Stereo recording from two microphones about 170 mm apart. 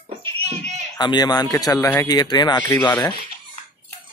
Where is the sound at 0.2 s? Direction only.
35° right (ahead or behind).